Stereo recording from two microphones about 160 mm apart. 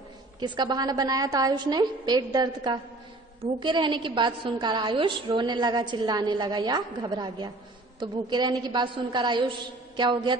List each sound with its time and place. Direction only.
0.4 s a woman's voice: 25° right (ahead or behind)